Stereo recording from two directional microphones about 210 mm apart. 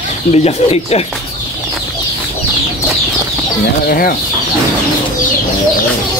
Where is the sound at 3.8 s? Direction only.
45° left (ahead or behind).